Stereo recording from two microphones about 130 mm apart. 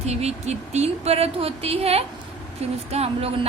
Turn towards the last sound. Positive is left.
turn(degrees=-50)  # may be behind; listen again after turning